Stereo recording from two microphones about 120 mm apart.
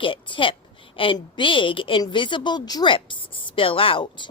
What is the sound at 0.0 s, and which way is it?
A woman's voice, 45° left (ahead or behind).